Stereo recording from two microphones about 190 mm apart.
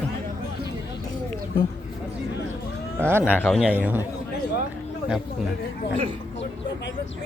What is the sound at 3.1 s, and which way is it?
Speech, 10° right (ahead or behind).